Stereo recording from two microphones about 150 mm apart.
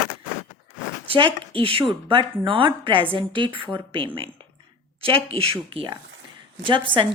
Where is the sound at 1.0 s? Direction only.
35° right (ahead or behind).